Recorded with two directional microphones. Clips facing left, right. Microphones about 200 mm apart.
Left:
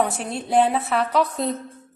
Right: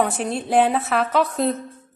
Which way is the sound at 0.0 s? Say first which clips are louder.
Right 2 dB; centre (ahead or behind).